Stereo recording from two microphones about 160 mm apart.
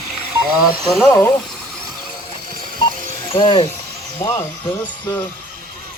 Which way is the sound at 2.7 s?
30° left (ahead or behind).